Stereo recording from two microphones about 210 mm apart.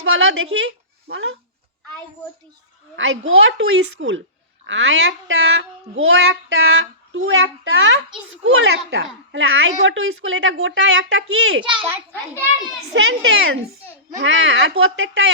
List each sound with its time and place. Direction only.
0.0 s a sound: 70° right (ahead or behind)
1.0 s a woman's voice: 60° right (ahead or behind)
2.9 s a woman's voice: 65° right (ahead or behind)
11.6 s a child's voice: 25° right (ahead or behind)
12.9 s a woman's voice: 60° right (ahead or behind)